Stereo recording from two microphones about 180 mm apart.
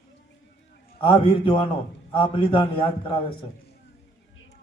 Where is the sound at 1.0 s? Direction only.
30° left (ahead or behind).